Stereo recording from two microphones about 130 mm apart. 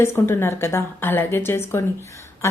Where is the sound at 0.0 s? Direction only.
20° left (ahead or behind).